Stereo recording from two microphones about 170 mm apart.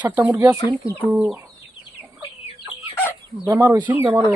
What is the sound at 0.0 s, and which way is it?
Speech, 10° right (ahead or behind).